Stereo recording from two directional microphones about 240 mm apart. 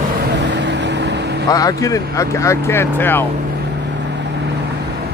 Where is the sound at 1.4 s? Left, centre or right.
Centre.